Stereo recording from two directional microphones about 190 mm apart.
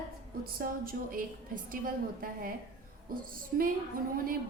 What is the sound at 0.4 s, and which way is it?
A woman's voice, 50° right (ahead or behind).